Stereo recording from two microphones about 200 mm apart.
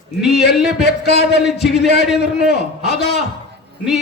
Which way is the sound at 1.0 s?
55° left (ahead or behind).